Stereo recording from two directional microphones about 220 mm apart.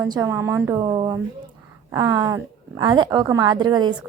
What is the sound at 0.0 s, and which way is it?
A woman's voice, 15° right (ahead or behind).